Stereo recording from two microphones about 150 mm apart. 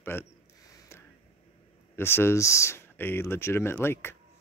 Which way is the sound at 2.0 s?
15° left (ahead or behind).